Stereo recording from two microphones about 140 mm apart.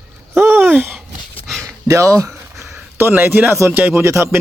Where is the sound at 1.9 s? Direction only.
20° right (ahead or behind).